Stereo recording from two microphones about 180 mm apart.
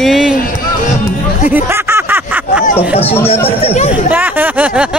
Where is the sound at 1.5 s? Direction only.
10° right (ahead or behind).